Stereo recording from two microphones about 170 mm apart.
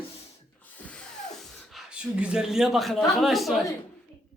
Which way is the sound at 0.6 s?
5° left (ahead or behind).